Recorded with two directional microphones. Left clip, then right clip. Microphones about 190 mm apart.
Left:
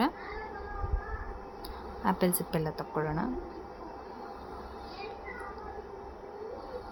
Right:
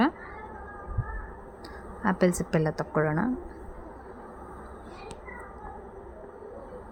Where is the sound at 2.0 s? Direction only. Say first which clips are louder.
Right 4 dB; 25° right (ahead or behind).